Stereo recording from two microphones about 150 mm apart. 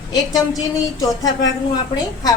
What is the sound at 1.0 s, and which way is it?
Speech, 25° left (ahead or behind).